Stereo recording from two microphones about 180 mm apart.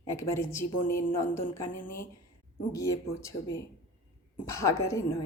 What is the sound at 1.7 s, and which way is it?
Speech, 50° left (ahead or behind).